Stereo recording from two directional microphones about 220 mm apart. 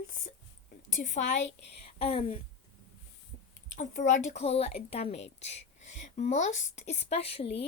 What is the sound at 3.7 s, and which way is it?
A woman's voice, 35° left (ahead or behind).